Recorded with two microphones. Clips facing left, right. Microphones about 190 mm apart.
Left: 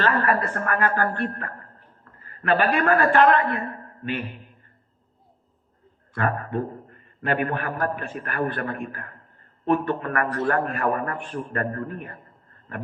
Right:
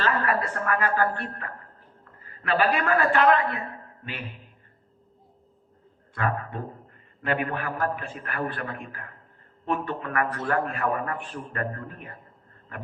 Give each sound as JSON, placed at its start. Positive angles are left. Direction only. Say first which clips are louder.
{"t": 0.0, "sound": "a man's voice", "louder": "left 3 dB", "side_deg": 50}
{"t": 6.1, "sound": "a man's voice", "louder": "left 4 dB", "side_deg": 45}